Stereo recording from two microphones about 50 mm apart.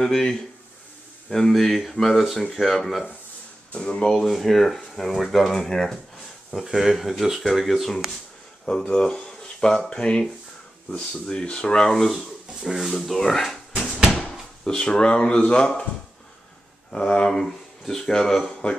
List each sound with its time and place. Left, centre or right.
0.0 s speech: centre
3.7 s speech: left
4.1 s speech: centre
6.5 s speech: centre
8.6 s speech: centre
14.6 s speech: centre
16.9 s speech: centre
17.3 s speech: centre